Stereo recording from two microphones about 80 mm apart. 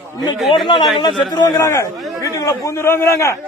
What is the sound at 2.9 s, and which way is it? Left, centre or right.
Speech, left.